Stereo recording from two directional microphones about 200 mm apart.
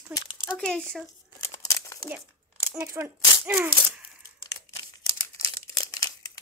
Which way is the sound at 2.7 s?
10° right (ahead or behind).